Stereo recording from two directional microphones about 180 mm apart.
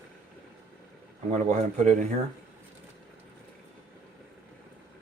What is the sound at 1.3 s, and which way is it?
Speech, 40° right (ahead or behind).